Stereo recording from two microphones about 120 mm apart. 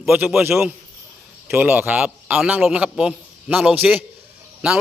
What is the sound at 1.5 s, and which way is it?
A man's voice, 15° right (ahead or behind).